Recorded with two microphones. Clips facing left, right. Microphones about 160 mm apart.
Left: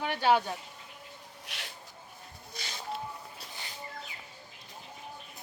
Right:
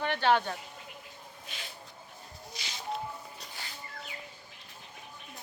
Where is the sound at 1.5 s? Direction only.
85° left.